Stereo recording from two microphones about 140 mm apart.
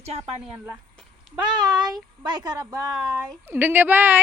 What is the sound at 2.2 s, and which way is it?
Speech, 30° right (ahead or behind).